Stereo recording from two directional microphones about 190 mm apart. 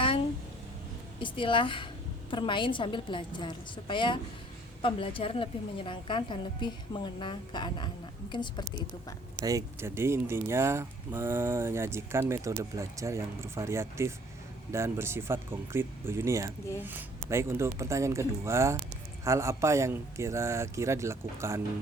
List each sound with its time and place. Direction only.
1.2 s speech: 25° left (ahead or behind)
9.4 s speech: 20° right (ahead or behind)